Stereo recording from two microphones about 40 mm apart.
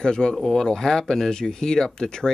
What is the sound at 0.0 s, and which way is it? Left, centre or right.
Speech, centre.